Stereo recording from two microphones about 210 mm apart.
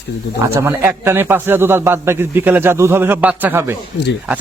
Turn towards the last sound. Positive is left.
turn(degrees=-10)  # may be behind; listen again after turning